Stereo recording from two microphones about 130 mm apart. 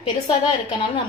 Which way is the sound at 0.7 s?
40° left (ahead or behind).